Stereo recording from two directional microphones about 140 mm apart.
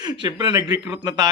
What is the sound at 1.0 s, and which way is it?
Speech, 30° right (ahead or behind).